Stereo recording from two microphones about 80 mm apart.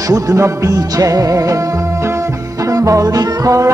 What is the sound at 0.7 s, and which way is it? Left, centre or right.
Music, right.